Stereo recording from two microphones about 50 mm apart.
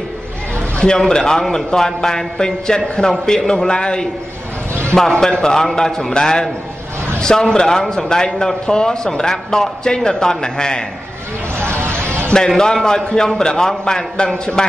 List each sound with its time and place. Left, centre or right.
0.7 s speech: centre
5.1 s speech: centre
11.5 s a sound: right
12.3 s speech: centre